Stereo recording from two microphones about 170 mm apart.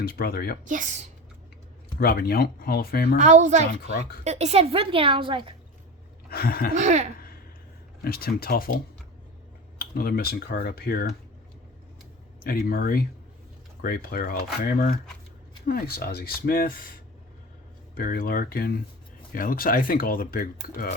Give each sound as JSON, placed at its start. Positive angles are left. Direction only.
{"t": 0.0, "sound": "speech", "side_deg": 65}
{"t": 0.6, "sound": "speech", "side_deg": -50}
{"t": 2.0, "sound": "speech", "side_deg": 65}
{"t": 3.2, "sound": "speech", "side_deg": -45}
{"t": 3.7, "sound": "speech", "side_deg": 60}
{"t": 4.2, "sound": "a woman's voice", "side_deg": -40}
{"t": 6.3, "sound": "speech", "side_deg": 60}
{"t": 6.7, "sound": "speech", "side_deg": -45}
{"t": 8.0, "sound": "speech", "side_deg": 60}
{"t": 12.4, "sound": "speech", "side_deg": 60}
{"t": 17.9, "sound": "speech", "side_deg": 60}